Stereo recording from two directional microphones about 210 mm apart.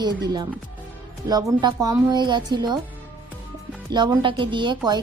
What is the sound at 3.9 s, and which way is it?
Speech, 20° right (ahead or behind).